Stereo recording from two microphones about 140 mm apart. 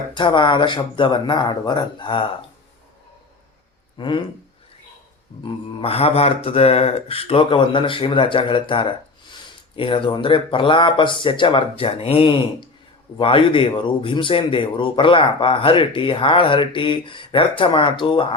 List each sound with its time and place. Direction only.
0.1 s speech: 35° left (ahead or behind)
3.9 s speech: 35° left (ahead or behind)
5.4 s speech: 40° left (ahead or behind)